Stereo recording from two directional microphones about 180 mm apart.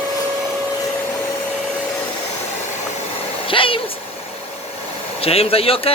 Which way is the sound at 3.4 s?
30° left (ahead or behind).